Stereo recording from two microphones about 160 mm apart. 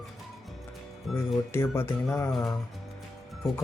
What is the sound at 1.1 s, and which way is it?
Speech, centre (ahead or behind).